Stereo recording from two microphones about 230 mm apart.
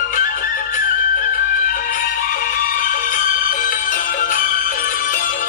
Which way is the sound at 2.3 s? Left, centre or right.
Left.